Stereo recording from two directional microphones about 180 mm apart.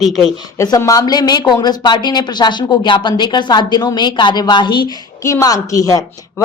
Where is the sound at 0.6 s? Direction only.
20° left (ahead or behind).